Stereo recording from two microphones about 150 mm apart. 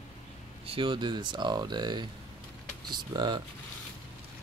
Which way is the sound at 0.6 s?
35° right (ahead or behind).